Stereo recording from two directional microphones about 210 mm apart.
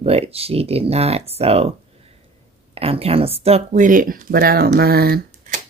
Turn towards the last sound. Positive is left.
turn(degrees=-40)  # may be behind; listen again after turning